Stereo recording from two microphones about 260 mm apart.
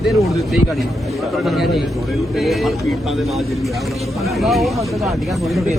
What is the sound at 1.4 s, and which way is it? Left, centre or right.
Speech, centre.